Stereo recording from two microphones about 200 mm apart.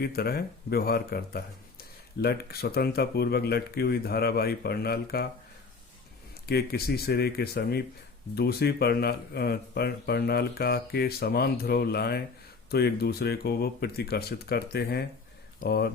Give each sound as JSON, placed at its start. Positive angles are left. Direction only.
{"t": 0.0, "sound": "speech", "side_deg": 50}
{"t": 6.5, "sound": "speech", "side_deg": 50}